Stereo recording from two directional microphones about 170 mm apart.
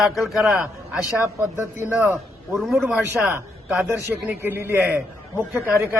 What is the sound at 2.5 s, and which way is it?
A man's voice, centre (ahead or behind).